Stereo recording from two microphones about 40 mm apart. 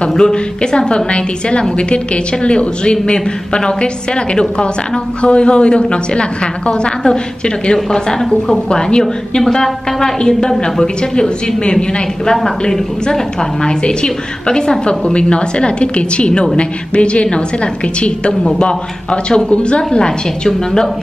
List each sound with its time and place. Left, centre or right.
0.2 s a woman's voice: centre
7.7 s a woman's voice: centre
13.1 s a woman's voice: centre
18.4 s a woman's voice: left